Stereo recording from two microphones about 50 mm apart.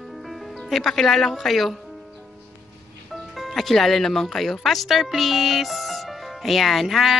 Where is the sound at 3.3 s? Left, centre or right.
Centre.